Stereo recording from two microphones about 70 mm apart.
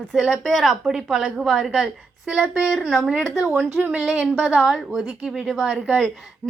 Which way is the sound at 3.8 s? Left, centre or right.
Centre.